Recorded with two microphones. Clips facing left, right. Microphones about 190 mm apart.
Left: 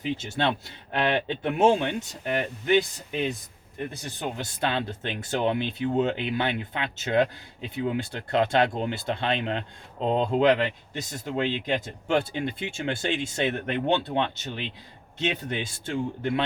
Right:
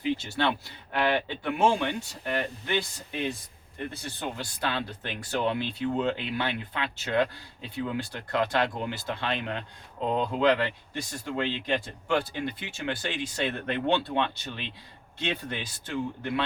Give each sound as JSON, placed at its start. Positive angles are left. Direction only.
{"t": 0.2, "sound": "speech", "side_deg": 20}